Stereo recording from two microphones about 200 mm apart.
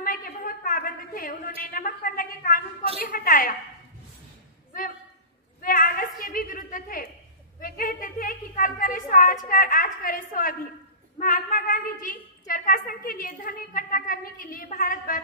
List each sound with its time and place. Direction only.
0.0 s a sound: 45° left (ahead or behind)
3.0 s a woman's voice: 45° left (ahead or behind)
5.6 s a woman's voice: 45° left (ahead or behind)